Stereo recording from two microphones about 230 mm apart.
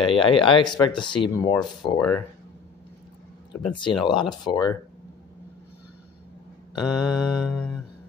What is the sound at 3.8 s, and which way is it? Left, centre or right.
Speech, left.